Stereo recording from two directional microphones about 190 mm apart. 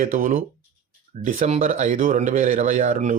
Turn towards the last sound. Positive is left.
turn(degrees=-40)  # may be behind; listen again after turning